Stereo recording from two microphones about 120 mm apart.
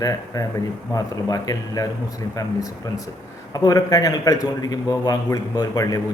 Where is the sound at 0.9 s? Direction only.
30° left (ahead or behind).